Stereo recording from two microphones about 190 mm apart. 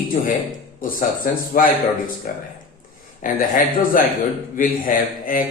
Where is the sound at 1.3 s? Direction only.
45° left (ahead or behind).